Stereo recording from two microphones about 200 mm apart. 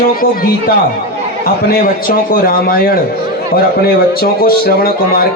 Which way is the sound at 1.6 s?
50° left (ahead or behind).